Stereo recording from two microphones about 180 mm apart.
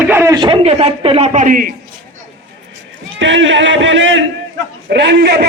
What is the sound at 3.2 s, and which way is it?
A man's voice, 90° right.